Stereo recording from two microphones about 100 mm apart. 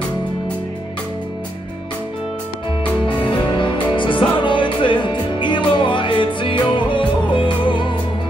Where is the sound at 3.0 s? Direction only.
55° left (ahead or behind).